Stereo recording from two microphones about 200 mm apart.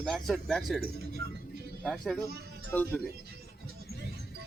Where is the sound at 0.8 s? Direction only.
50° right (ahead or behind).